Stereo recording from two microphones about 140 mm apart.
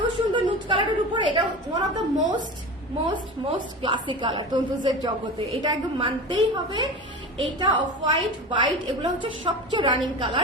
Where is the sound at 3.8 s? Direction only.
35° right (ahead or behind).